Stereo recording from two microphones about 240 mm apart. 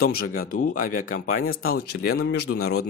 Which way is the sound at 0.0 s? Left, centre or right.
Left.